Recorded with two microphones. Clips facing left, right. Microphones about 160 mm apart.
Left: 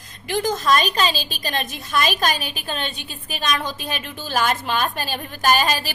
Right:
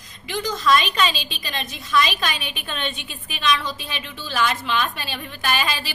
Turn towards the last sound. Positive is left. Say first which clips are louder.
# left 5 dB
turn(degrees=45)  # may be behind; listen again after turning